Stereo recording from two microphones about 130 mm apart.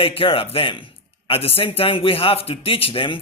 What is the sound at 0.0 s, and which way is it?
Speech, 45° left (ahead or behind).